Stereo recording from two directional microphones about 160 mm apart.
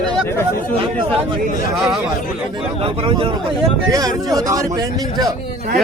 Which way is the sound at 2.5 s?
35° right (ahead or behind).